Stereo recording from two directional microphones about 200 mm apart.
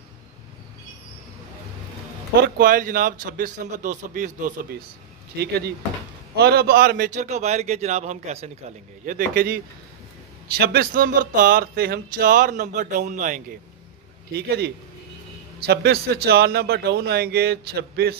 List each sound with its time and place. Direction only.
2.4 s speech: 50° right (ahead or behind)
6.3 s a man's voice: 55° right (ahead or behind)
15.6 s speech: 50° right (ahead or behind)